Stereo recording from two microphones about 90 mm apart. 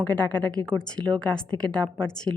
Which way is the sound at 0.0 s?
15° left (ahead or behind).